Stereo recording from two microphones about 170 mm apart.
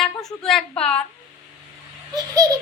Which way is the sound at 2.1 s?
20° right (ahead or behind).